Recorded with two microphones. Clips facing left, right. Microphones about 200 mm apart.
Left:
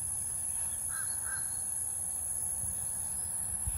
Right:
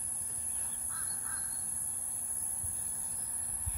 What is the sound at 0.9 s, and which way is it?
Crow, 45° left (ahead or behind).